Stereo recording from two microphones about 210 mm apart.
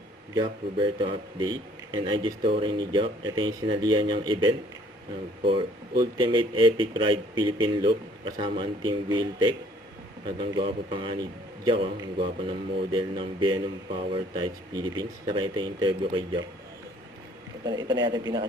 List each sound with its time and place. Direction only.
0.3 s a man's voice: 20° right (ahead or behind)
17.7 s a man's voice: 20° right (ahead or behind)